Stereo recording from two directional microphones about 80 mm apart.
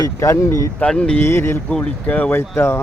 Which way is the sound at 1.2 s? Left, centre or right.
Left.